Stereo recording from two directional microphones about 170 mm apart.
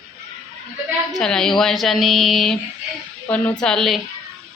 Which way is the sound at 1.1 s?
5° left (ahead or behind).